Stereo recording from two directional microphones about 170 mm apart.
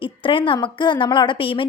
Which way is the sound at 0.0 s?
30° left (ahead or behind).